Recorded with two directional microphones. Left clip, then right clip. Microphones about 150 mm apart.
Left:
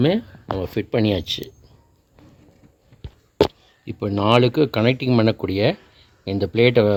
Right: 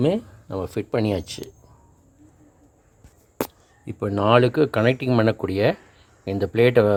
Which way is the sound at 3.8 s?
5° left (ahead or behind).